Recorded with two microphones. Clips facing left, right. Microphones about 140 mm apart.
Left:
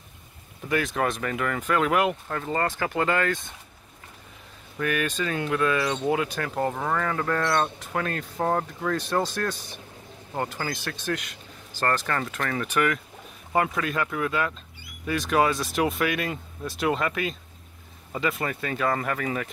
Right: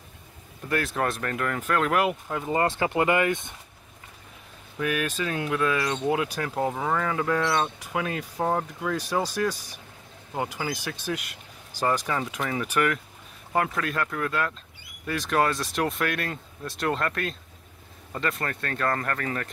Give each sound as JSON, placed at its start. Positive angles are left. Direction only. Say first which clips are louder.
{"t": 0.7, "sound": "speech", "louder": "left 1 dB", "side_deg": 0}
{"t": 2.6, "sound": "speech", "louder": "right 3 dB", "side_deg": -25}
{"t": 4.7, "sound": "speech", "louder": "left 1 dB", "side_deg": -5}